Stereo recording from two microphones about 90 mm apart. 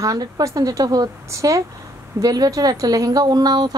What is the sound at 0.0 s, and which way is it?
A woman's voice, 40° right (ahead or behind).